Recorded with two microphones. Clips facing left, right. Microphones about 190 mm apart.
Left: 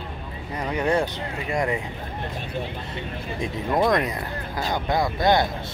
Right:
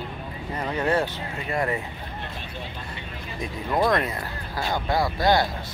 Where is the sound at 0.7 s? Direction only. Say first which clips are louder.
Left 1 dB; 15° left (ahead or behind).